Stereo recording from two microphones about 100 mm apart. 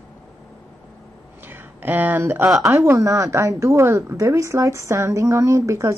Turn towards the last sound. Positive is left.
turn(degrees=-30)  # may be behind; listen again after turning